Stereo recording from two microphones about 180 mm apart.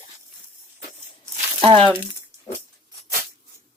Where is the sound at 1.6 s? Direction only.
30° right (ahead or behind).